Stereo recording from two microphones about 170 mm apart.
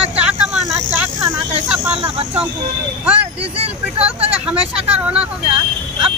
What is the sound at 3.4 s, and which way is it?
Speech, 35° right (ahead or behind).